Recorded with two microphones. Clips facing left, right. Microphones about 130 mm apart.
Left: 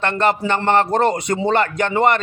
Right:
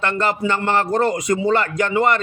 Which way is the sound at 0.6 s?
25° left (ahead or behind).